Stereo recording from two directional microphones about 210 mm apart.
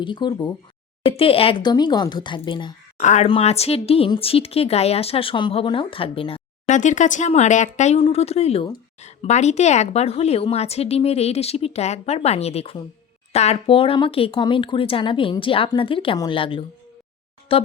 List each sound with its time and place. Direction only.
0.0 s speech: 20° left (ahead or behind)
3.0 s speech: 35° left (ahead or behind)